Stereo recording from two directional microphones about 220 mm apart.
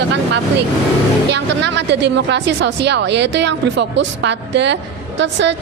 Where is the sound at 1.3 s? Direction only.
50° right (ahead or behind).